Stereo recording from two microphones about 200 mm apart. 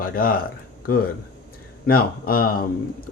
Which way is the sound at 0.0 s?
45° left (ahead or behind).